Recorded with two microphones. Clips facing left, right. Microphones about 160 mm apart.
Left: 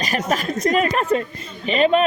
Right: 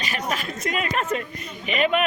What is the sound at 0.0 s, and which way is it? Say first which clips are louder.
Speech: left 6 dB; 45° left (ahead or behind).